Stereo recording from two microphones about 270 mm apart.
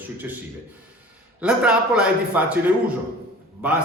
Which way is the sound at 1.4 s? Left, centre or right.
Centre.